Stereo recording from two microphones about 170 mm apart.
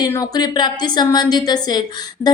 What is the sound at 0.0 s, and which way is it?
A woman's voice, 20° left (ahead or behind).